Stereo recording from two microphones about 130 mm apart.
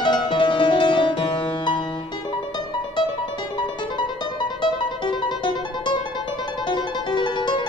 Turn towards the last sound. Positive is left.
turn(degrees=35)  # may be behind; listen again after turning